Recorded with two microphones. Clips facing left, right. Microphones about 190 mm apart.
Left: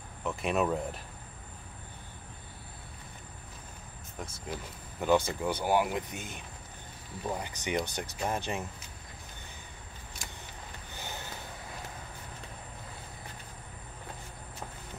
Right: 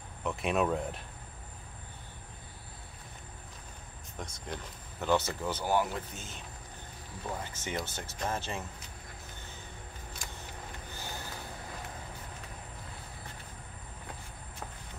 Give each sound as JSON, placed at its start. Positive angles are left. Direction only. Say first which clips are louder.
{"t": 0.2, "sound": "speech", "louder": "even", "side_deg": 0}
{"t": 4.2, "sound": "speech", "louder": "left 1 dB", "side_deg": 10}